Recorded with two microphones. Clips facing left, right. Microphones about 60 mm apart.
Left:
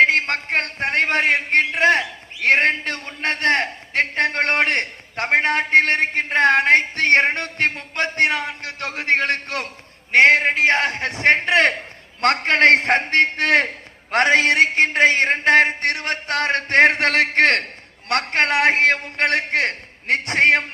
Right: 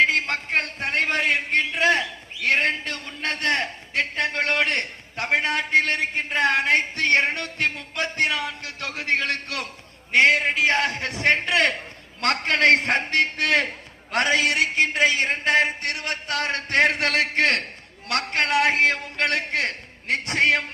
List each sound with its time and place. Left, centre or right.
0.0 s a man's voice: left